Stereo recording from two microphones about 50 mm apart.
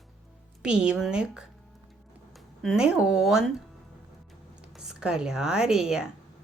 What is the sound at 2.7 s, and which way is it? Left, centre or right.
Speech, right.